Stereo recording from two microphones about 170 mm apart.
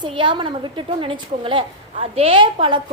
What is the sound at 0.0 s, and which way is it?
A woman's voice, 30° right (ahead or behind).